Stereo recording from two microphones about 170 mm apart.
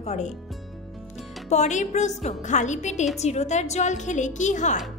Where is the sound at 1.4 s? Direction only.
45° left (ahead or behind).